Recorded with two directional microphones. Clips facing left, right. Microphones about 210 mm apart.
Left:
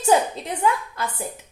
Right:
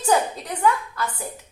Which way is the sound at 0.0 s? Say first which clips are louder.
Left 2 dB; 25° left (ahead or behind).